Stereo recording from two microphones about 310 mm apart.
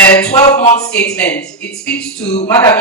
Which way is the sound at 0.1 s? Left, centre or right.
Centre.